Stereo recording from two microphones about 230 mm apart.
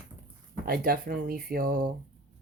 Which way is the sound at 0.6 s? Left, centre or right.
Right.